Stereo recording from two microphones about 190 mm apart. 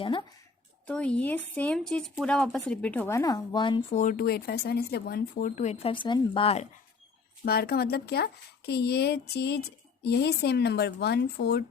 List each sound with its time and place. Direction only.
0.0 s a sound: 25° left (ahead or behind)
0.9 s speech: 5° left (ahead or behind); by 3.8 s 25° left (ahead or behind)
3.9 s speech: 45° left (ahead or behind)
7.4 s speech: 55° left (ahead or behind)